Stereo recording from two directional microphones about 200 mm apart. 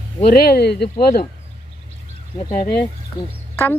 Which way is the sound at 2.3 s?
15° left (ahead or behind).